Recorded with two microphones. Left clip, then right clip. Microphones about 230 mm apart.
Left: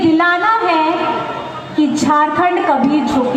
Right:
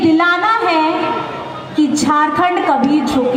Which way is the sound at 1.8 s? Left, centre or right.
Right.